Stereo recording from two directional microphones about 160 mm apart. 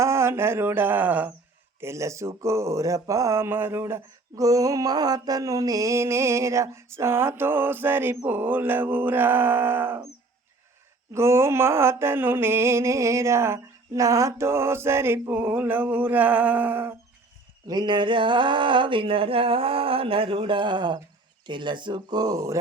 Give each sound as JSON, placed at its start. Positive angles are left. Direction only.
{"t": 0.0, "sound": "speech", "side_deg": -15}
{"t": 11.1, "sound": "speech", "side_deg": -15}
{"t": 17.7, "sound": "a sound", "side_deg": -25}
{"t": 21.4, "sound": "speech", "side_deg": -30}